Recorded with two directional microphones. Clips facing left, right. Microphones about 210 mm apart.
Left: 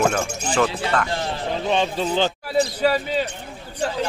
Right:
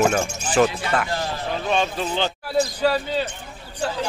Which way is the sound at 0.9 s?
20° right (ahead or behind).